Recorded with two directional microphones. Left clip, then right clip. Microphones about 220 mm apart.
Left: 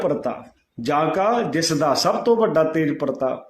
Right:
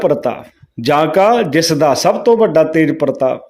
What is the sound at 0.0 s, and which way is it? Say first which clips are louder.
A man's voice: right 8 dB; 40° right (ahead or behind).